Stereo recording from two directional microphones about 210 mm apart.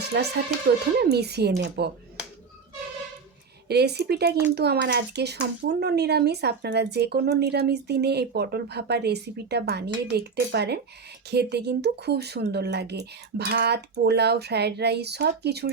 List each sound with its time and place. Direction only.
0.1 s speech: 50° right (ahead or behind)
3.7 s speech: 50° right (ahead or behind)